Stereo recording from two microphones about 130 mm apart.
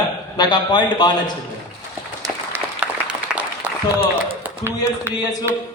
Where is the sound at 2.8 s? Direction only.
10° right (ahead or behind).